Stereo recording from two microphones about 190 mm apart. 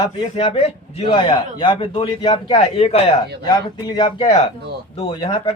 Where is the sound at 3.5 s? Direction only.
25° left (ahead or behind).